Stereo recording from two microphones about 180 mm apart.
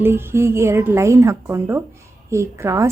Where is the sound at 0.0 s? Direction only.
15° right (ahead or behind).